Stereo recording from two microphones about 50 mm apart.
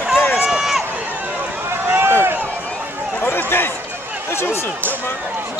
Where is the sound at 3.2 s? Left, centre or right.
Left.